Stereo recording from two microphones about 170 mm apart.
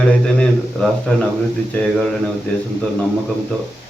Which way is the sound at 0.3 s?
5° left (ahead or behind).